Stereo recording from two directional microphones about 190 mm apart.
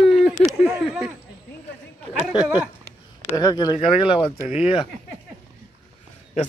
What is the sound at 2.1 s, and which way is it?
Speech, centre (ahead or behind).